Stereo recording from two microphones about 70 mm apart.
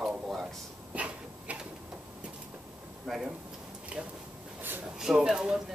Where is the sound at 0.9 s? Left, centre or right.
Centre.